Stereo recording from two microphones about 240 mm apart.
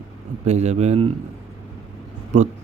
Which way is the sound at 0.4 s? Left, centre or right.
Right.